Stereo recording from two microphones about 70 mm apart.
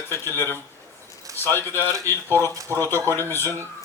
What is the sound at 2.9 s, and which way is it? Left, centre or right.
Speech, left.